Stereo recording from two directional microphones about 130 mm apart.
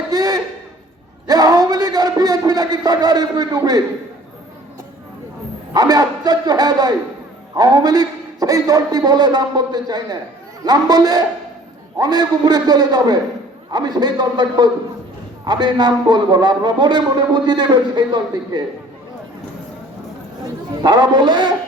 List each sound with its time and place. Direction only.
0.1 s a sound: 30° right (ahead or behind)
5.7 s a man's voice: 30° right (ahead or behind)
20.8 s a man's voice: 35° right (ahead or behind)